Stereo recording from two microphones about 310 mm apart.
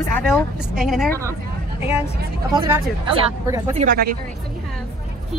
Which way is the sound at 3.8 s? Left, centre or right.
Right.